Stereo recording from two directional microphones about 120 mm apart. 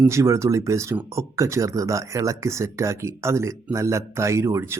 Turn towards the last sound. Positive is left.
turn(degrees=-25)  # may be behind; listen again after turning